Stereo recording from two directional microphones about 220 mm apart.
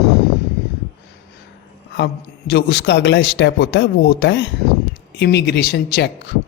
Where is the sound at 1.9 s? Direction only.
50° left (ahead or behind).